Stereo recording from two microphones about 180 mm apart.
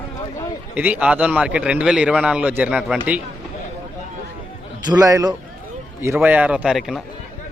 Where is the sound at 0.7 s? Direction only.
10° right (ahead or behind).